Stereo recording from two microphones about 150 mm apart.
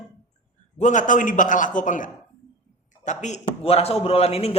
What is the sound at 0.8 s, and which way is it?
A man's voice, 55° left (ahead or behind).